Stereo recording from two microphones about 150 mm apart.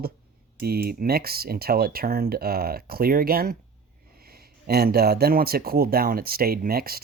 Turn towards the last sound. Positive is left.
turn(degrees=-90)